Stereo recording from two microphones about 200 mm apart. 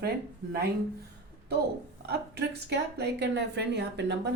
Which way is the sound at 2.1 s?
55° right (ahead or behind).